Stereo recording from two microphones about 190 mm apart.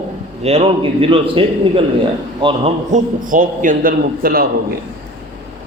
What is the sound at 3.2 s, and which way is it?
A man's voice, 45° right (ahead or behind).